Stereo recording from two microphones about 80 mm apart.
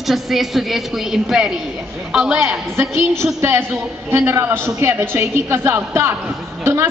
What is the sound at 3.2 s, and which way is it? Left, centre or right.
A woman's voice, right.